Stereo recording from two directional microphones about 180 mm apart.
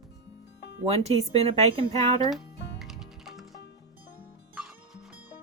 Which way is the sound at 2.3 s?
Centre (ahead or behind).